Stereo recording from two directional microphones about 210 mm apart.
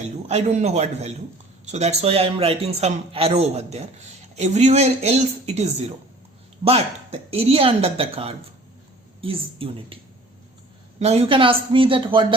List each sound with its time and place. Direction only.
0.3 s a woman's voice: 30° right (ahead or behind)
6.7 s a man's voice: 30° right (ahead or behind)
11.0 s a man's voice: 30° right (ahead or behind)